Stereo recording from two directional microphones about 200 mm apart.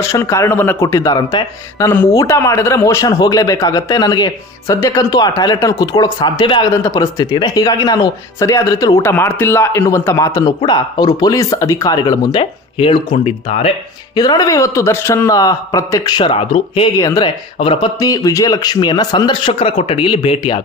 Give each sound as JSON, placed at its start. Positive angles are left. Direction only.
{"t": 0.0, "sound": "speech", "side_deg": 15}
{"t": 14.1, "sound": "speech", "side_deg": 20}
{"t": 17.0, "sound": "speech", "side_deg": 20}